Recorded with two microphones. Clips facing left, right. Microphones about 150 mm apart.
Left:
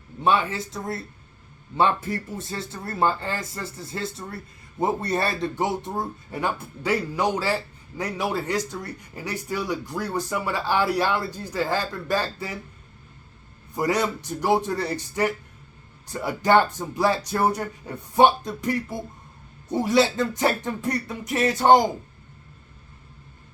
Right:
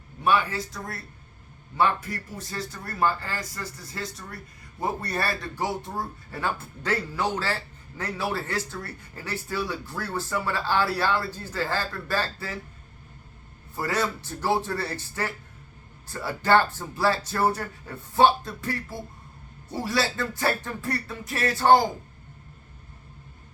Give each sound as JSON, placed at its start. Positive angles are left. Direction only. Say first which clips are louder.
{"t": 0.2, "sound": "a man's voice", "louder": "left 2 dB", "side_deg": 25}
{"t": 13.7, "sound": "a man's voice", "louder": "left 4 dB", "side_deg": 15}